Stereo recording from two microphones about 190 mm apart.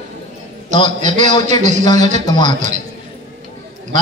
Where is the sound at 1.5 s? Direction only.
40° right (ahead or behind).